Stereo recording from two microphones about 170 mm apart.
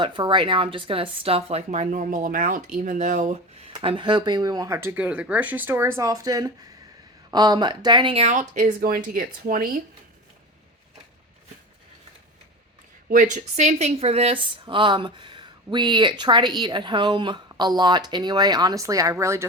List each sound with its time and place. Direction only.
0.0 s speech: 30° right (ahead or behind); by 3.7 s 45° right (ahead or behind)
3.7 s speech: 30° right (ahead or behind); by 9.8 s 55° right (ahead or behind)
13.1 s speech: 50° right (ahead or behind); by 19.5 s 15° right (ahead or behind)